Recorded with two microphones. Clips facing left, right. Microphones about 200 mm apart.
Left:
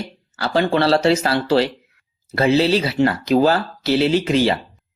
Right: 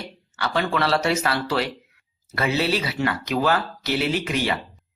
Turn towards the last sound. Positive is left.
turn(degrees=30)  # may be behind; listen again after turning